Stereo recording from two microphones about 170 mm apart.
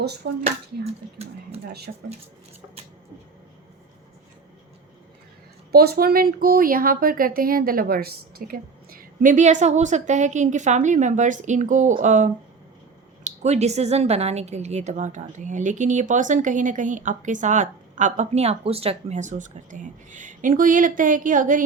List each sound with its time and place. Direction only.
0.2 s speech: 65° right (ahead or behind)
5.7 s speech: 65° right (ahead or behind)